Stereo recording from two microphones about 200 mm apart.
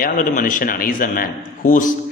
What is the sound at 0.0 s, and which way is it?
A man's voice, 45° left (ahead or behind).